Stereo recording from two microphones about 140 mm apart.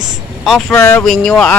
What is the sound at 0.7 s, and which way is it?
Speech, 15° left (ahead or behind).